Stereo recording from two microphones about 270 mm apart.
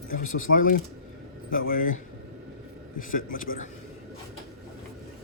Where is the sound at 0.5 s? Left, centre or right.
Left.